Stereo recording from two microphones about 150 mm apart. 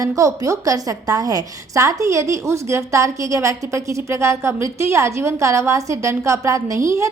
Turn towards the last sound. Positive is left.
turn(degrees=-20)  # may be behind; listen again after turning